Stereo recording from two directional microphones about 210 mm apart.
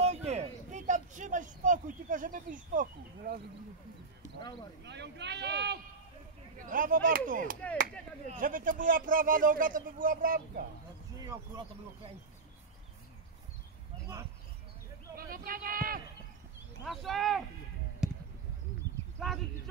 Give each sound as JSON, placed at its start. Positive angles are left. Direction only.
{"t": 0.0, "sound": "a sound", "side_deg": -30}
{"t": 4.8, "sound": "speech", "side_deg": -55}
{"t": 6.6, "sound": "speech", "side_deg": -40}
{"t": 11.1, "sound": "speech", "side_deg": -20}
{"t": 15.1, "sound": "speech", "side_deg": -45}
{"t": 16.8, "sound": "speech", "side_deg": 0}
{"t": 18.0, "sound": "arrow", "side_deg": -5}
{"t": 19.1, "sound": "speech", "side_deg": 0}